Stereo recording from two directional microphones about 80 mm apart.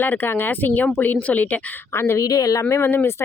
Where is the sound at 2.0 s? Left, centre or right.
Left.